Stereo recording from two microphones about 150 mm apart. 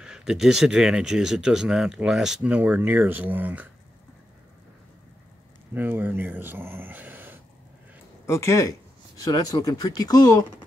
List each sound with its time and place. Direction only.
0.0 s speech: 5° right (ahead or behind)
5.8 s speech: 15° right (ahead or behind)
8.3 s speech: 20° left (ahead or behind)